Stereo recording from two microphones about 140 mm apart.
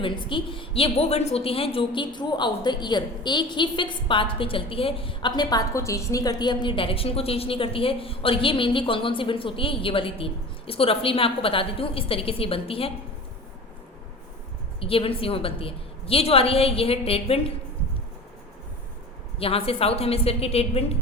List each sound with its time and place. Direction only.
0.0 s a woman's voice: 35° left (ahead or behind)
14.8 s a woman's voice: 40° left (ahead or behind)
19.4 s a woman's voice: 45° left (ahead or behind)